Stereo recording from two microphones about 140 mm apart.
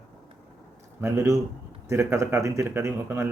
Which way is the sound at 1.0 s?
20° right (ahead or behind).